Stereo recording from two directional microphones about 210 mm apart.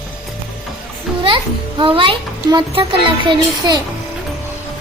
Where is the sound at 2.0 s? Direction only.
25° right (ahead or behind).